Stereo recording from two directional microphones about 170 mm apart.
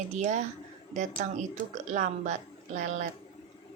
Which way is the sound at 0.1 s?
45° right (ahead or behind).